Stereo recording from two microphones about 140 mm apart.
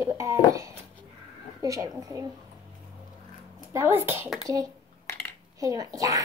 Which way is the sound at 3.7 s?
20° right (ahead or behind).